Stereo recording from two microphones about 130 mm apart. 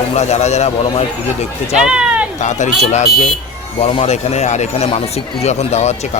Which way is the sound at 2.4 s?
65° left (ahead or behind).